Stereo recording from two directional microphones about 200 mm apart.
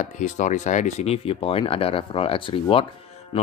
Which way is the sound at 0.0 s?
35° left (ahead or behind).